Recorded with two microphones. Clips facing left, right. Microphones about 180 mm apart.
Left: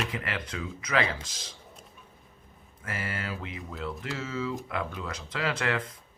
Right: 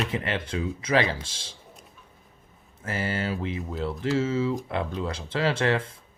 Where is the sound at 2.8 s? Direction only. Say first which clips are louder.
Right 7 dB; 25° right (ahead or behind).